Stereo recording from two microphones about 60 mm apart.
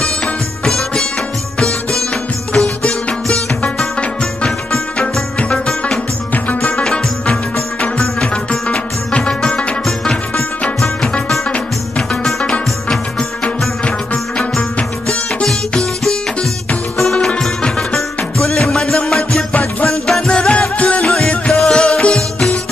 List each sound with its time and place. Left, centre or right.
0.7 s music: centre
6.3 s music: left
6.8 s music: centre
9.8 s music: centre
13.4 s music: left
17.0 s music: centre
21.1 s music: centre